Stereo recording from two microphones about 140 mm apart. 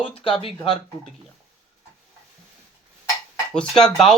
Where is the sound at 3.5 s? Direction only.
5° left (ahead or behind).